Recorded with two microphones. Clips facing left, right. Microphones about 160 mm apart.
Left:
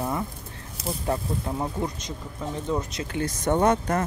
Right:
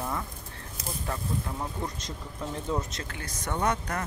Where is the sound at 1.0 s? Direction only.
25° left (ahead or behind).